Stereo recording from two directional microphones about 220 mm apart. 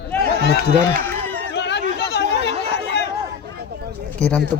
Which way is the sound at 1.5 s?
50° left (ahead or behind).